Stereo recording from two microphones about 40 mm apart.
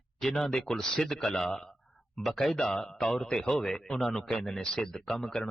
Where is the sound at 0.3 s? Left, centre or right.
Centre.